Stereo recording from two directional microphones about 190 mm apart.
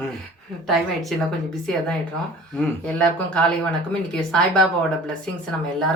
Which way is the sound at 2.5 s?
5° left (ahead or behind).